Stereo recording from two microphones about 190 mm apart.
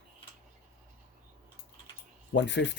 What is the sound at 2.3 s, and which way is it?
Speech, 70° left (ahead or behind).